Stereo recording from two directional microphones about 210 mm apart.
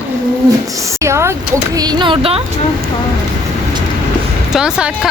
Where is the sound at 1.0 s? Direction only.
15° right (ahead or behind).